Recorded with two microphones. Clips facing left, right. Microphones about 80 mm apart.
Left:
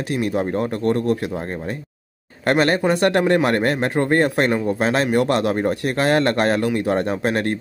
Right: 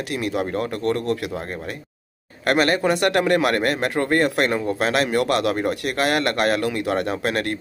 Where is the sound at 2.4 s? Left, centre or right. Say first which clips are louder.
Left 1 dB; left.